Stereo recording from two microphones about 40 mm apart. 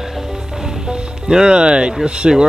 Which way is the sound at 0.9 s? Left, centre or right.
Centre.